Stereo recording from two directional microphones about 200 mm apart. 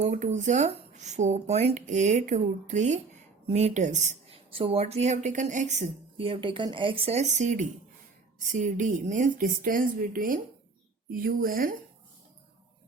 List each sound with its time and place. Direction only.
0.0 s a woman's voice: 35° right (ahead or behind)